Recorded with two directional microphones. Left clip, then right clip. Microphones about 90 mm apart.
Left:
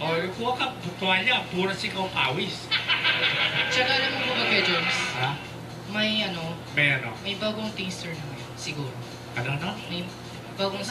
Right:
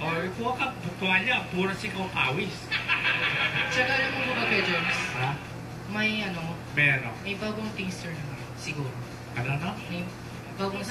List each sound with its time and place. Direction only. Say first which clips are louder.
0.0 s speech: left 3 dB; 40° left (ahead or behind)
9.3 s speech: left 2 dB; 40° left (ahead or behind)